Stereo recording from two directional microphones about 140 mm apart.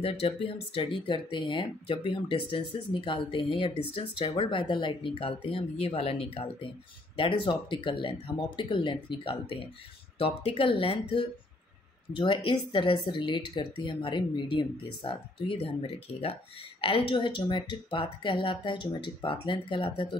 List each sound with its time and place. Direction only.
0.0 s speech: 40° left (ahead or behind)
16.8 s speech: 35° left (ahead or behind)